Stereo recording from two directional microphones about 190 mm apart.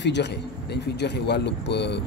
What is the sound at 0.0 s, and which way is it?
A man's voice, 65° left (ahead or behind).